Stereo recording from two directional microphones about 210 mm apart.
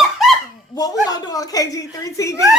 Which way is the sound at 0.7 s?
20° left (ahead or behind).